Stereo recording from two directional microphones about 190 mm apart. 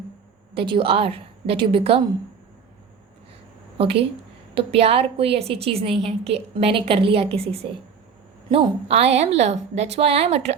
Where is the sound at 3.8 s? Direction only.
30° right (ahead or behind).